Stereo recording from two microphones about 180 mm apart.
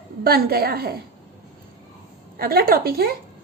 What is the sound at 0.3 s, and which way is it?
Speech, 60° right (ahead or behind).